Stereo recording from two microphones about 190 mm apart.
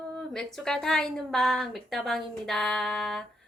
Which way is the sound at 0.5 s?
Centre (ahead or behind).